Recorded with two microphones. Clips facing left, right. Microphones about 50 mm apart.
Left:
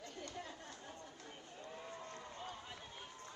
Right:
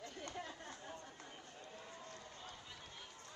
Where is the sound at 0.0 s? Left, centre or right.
Right.